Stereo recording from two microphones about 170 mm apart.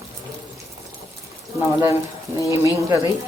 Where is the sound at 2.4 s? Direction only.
20° right (ahead or behind).